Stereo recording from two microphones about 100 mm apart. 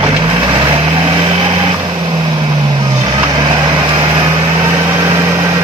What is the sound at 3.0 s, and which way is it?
Vehicle, 45° right (ahead or behind).